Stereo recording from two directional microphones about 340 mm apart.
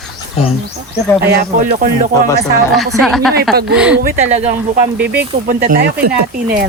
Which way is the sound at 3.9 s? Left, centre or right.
Right.